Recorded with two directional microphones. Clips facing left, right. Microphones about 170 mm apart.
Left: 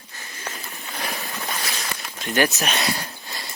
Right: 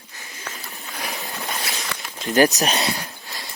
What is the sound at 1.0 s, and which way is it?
Boat, 15° right (ahead or behind).